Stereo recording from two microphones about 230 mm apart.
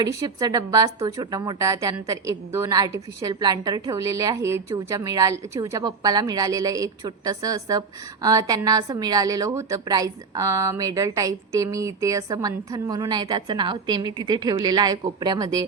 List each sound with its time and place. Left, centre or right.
0.0 s a woman's voice: centre